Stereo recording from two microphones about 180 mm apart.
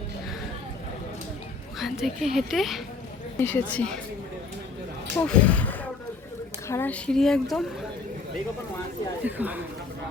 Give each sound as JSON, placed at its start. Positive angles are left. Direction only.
{"t": 1.8, "sound": "a woman's voice", "side_deg": 0}
{"t": 3.3, "sound": "a woman's voice", "side_deg": 10}
{"t": 5.2, "sound": "a woman's voice", "side_deg": 5}
{"t": 9.2, "sound": "speech", "side_deg": -10}